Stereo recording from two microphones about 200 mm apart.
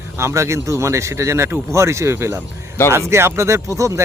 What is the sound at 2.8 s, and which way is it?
Speech, 10° left (ahead or behind).